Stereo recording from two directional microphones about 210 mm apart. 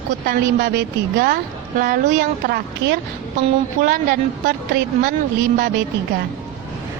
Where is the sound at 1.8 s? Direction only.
35° right (ahead or behind).